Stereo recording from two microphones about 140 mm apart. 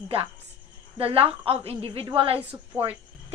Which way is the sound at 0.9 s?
45° right (ahead or behind).